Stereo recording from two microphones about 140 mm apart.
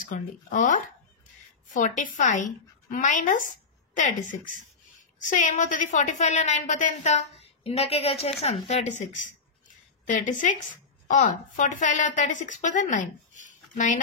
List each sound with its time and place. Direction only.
0.1 s a woman's voice: 65° left (ahead or behind)